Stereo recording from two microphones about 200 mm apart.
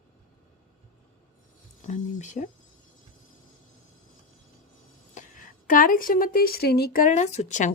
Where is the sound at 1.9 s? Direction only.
35° left (ahead or behind).